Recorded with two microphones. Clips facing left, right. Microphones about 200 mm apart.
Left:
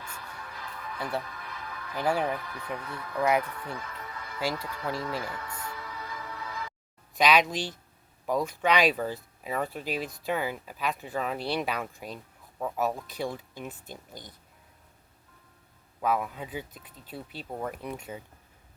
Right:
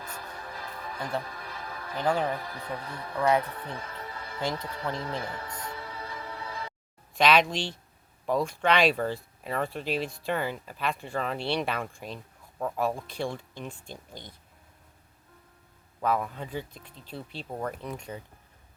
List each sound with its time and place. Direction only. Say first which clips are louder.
0.0 s music: right 3 dB; 40° right (ahead or behind)
2.3 s speech: even; 35° right (ahead or behind)
3.3 s music: right 1 dB; 30° right (ahead or behind)
4.5 s speech: right 1 dB; 25° right (ahead or behind)
4.9 s music: even; 25° right (ahead or behind)
7.2 s speech: right 1 dB; centre (ahead or behind)
16.0 s speech: even; 5° left (ahead or behind)